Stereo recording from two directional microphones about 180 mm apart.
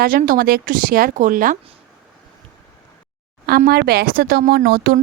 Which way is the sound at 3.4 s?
55° right (ahead or behind).